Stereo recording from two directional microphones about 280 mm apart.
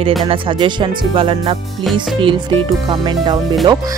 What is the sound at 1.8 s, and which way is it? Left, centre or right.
Speech, centre.